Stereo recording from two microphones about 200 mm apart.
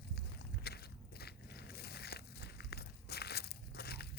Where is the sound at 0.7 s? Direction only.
55° left (ahead or behind).